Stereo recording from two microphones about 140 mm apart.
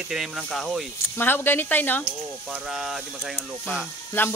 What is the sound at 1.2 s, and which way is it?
Speech, 15° left (ahead or behind).